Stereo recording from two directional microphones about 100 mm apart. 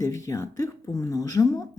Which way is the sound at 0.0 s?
30° left (ahead or behind).